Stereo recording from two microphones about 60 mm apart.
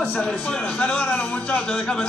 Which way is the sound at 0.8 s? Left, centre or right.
Left.